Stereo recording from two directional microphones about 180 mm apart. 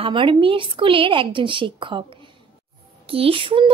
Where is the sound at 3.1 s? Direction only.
30° right (ahead or behind).